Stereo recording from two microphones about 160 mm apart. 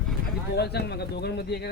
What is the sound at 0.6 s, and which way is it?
Speech, 90° left.